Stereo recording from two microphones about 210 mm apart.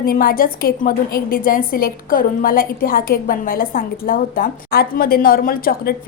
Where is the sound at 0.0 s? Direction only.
45° left (ahead or behind).